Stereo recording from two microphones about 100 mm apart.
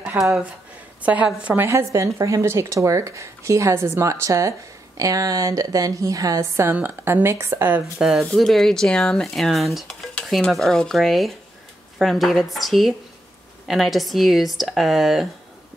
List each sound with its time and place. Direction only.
0.2 s a woman's voice: 15° right (ahead or behind)
1.7 s speech: 30° right (ahead or behind)
8.0 s speech: 5° right (ahead or behind)